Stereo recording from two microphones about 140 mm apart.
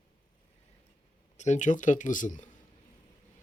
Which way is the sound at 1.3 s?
60° left (ahead or behind).